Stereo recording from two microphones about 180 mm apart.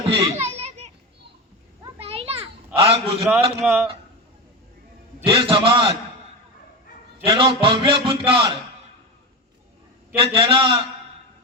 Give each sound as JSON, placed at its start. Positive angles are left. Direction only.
{"t": 0.0, "sound": "children playing", "side_deg": -30}
{"t": 2.0, "sound": "children playing", "side_deg": -35}
{"t": 2.7, "sound": "a sound", "side_deg": -30}
{"t": 3.6, "sound": "speech", "side_deg": -10}
{"t": 5.2, "sound": "a man's voice", "side_deg": -30}
{"t": 7.3, "sound": "a man's voice", "side_deg": -30}
{"t": 10.2, "sound": "a man's voice", "side_deg": -30}